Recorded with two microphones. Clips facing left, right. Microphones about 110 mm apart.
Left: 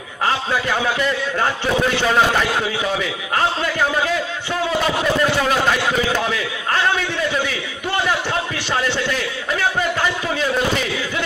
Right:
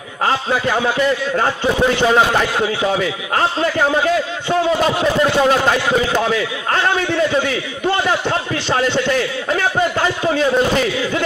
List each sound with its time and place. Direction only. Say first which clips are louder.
1.4 s a man's voice: right 1 dB; 20° right (ahead or behind)
3.3 s a man's voice: right 2 dB; 25° right (ahead or behind)
5.4 s a man's voice: right 4 dB; 25° right (ahead or behind)